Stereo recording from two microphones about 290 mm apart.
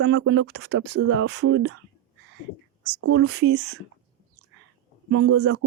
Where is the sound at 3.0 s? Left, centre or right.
Right.